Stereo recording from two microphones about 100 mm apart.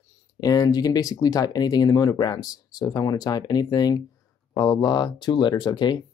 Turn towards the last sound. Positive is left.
turn(degrees=50)  # may be behind; listen again after turning